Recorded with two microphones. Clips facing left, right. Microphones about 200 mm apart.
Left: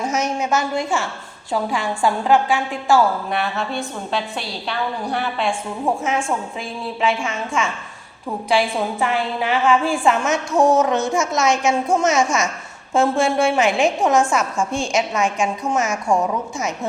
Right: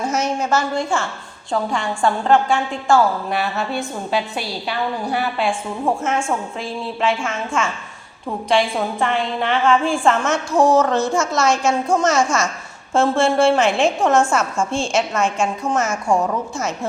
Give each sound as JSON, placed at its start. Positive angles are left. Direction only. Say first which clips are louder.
{"t": 2.0, "sound": "a woman's voice", "louder": "right 1 dB", "side_deg": 5}
{"t": 10.8, "sound": "a woman's voice", "louder": "right 1 dB", "side_deg": 20}
{"t": 12.9, "sound": "a woman's voice", "louder": "right 1 dB", "side_deg": 0}
{"t": 14.1, "sound": "a woman's voice", "louder": "right 1 dB", "side_deg": 15}
{"t": 15.6, "sound": "a woman's voice", "louder": "right 1 dB", "side_deg": 0}